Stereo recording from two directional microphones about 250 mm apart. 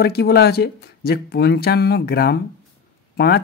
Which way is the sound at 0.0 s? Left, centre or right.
Left.